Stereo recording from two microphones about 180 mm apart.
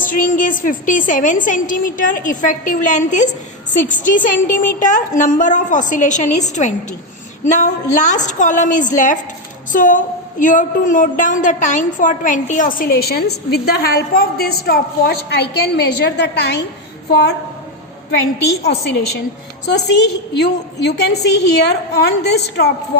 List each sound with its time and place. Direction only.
0.0 s a woman's voice: 50° left (ahead or behind); by 16.6 s 70° left (ahead or behind)
18.6 s a woman's voice: 65° left (ahead or behind)
20.4 s a woman's voice: 70° left (ahead or behind)